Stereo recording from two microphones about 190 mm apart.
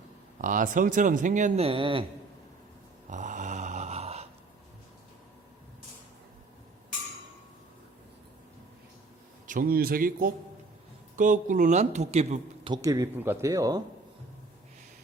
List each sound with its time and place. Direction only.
0.4 s speech: 45° right (ahead or behind); by 2.0 s 30° right (ahead or behind)
3.1 s a sound: 40° right (ahead or behind)
9.5 s a man's voice: 50° right (ahead or behind)
12.7 s speech: 20° right (ahead or behind)